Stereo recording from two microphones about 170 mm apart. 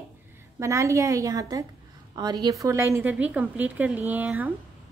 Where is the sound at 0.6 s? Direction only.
15° right (ahead or behind).